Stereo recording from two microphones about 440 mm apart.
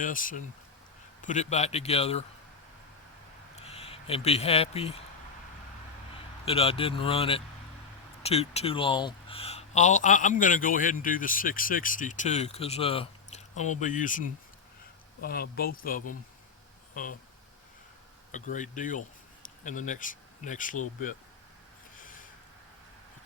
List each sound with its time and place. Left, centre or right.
0.0 s speech: centre
3.5 s speech: centre
6.4 s speech: centre
18.3 s speech: centre